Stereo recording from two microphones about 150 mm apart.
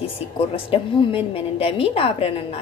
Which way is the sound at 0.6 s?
35° left (ahead or behind).